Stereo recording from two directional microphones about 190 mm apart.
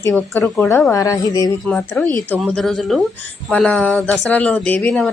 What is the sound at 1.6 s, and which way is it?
Speech, 5° left (ahead or behind).